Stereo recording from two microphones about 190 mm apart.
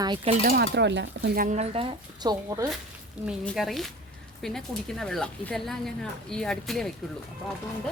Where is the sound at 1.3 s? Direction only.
40° right (ahead or behind); by 2.7 s 20° right (ahead or behind).